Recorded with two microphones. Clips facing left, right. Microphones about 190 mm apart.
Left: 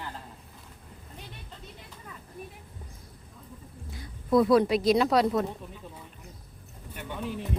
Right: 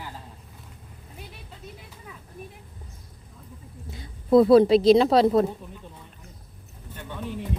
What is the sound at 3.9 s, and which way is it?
A woman's voice, 25° right (ahead or behind).